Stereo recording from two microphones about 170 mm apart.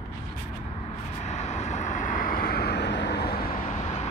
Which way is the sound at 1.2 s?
40° left (ahead or behind).